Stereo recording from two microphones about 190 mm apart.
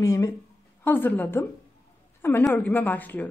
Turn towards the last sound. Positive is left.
turn(degrees=10)  # may be behind; listen again after turning